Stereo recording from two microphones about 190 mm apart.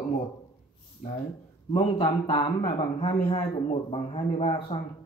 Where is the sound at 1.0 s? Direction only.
40° left (ahead or behind).